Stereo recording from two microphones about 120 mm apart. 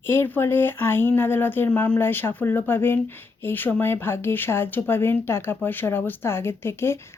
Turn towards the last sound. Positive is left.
turn(degrees=20)  # may be behind; listen again after turning